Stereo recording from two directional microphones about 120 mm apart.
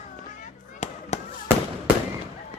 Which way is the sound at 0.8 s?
65° left (ahead or behind).